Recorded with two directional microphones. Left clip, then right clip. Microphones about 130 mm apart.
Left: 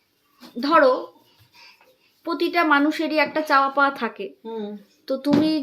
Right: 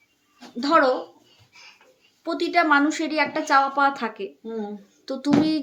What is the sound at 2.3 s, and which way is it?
A woman's voice, 20° left (ahead or behind).